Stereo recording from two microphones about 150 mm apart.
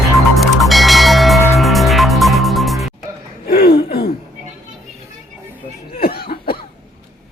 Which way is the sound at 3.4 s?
90° left.